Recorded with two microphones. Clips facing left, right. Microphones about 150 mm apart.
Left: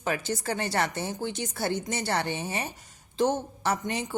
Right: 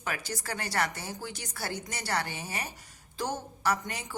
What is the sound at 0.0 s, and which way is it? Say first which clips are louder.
Speech: left 6 dB; 25° left (ahead or behind).